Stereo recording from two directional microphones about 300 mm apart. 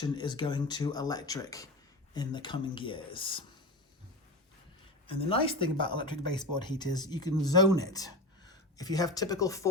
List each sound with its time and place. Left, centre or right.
0.0 s speech: centre
5.0 s speech: centre